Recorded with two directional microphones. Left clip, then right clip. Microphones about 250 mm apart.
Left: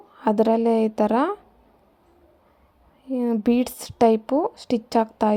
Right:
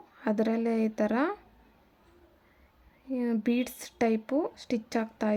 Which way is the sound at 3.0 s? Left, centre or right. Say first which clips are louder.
Left 8 dB; centre.